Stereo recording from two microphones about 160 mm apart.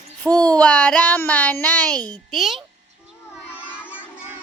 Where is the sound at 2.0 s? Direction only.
25° right (ahead or behind).